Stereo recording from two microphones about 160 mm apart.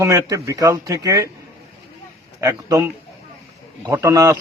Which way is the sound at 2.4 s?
20° right (ahead or behind).